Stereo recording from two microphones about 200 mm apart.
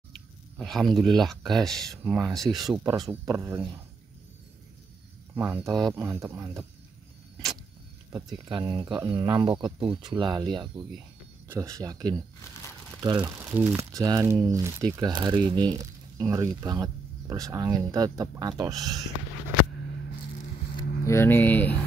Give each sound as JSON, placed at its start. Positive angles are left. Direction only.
{"t": 0.1, "sound": "speech", "side_deg": 0}
{"t": 5.3, "sound": "speech", "side_deg": -10}
{"t": 8.5, "sound": "speech", "side_deg": -25}
{"t": 20.7, "sound": "speech", "side_deg": 15}